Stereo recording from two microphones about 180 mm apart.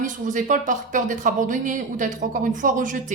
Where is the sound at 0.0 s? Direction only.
45° right (ahead or behind).